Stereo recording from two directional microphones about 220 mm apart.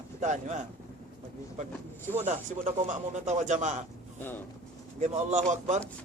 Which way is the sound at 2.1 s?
30° right (ahead or behind).